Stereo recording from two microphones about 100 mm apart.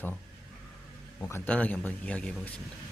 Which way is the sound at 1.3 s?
15° left (ahead or behind).